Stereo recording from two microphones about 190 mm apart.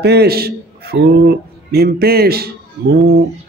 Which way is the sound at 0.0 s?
60° right (ahead or behind).